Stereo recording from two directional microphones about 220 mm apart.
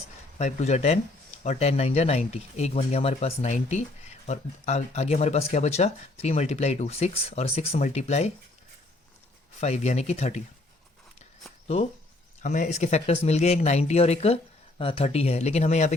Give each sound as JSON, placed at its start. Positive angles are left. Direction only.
{"t": 0.3, "sound": "speech", "side_deg": 30}
{"t": 9.6, "sound": "speech", "side_deg": 30}
{"t": 12.4, "sound": "speech", "side_deg": 35}